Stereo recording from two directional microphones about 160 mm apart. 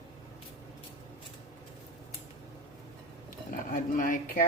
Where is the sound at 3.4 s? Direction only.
60° left (ahead or behind).